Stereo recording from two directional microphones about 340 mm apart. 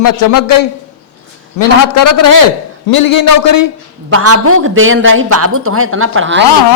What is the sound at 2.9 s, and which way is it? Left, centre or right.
Speech, left.